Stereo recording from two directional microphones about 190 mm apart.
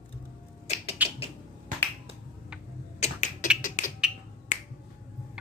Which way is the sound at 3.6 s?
40° left (ahead or behind).